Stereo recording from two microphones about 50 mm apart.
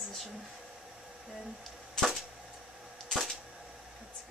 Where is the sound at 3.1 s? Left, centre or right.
Centre.